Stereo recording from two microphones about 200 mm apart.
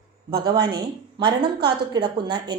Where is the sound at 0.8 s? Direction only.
20° right (ahead or behind).